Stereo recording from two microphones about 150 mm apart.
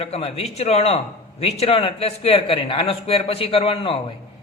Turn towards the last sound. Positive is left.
turn(degrees=40)  # may be behind; listen again after turning